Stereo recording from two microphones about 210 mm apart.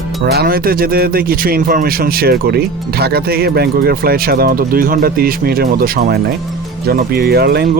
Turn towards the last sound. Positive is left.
turn(degrees=-50)  # may be behind; listen again after turning